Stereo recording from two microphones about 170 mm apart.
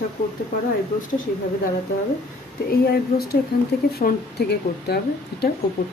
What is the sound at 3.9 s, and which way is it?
Speech, 65° left (ahead or behind).